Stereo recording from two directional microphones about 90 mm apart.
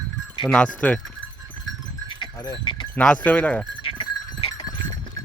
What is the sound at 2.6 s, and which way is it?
Sheep, 65° left (ahead or behind).